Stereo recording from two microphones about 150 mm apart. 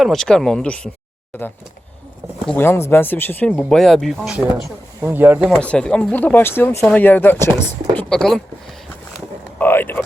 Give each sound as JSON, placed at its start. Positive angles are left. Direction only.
{"t": 0.0, "sound": "speech", "side_deg": 0}
{"t": 2.6, "sound": "speech", "side_deg": 15}
{"t": 3.7, "sound": "speech", "side_deg": 0}
{"t": 4.9, "sound": "speech", "side_deg": -15}
{"t": 5.5, "sound": "speech", "side_deg": 5}
{"t": 7.9, "sound": "speech", "side_deg": 5}
{"t": 9.6, "sound": "speech", "side_deg": 15}